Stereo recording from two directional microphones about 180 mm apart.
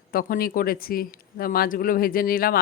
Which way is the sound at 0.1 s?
55° left (ahead or behind).